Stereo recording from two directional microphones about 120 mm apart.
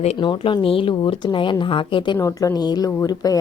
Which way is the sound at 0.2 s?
45° left (ahead or behind).